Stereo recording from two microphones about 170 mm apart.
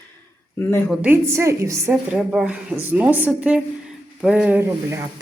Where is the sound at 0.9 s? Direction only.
10° right (ahead or behind).